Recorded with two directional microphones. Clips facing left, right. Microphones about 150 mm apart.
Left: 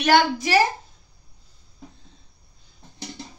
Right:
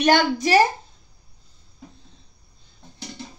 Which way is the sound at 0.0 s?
40° right (ahead or behind).